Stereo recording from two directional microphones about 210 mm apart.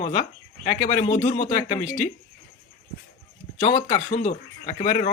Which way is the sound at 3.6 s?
35° left (ahead or behind).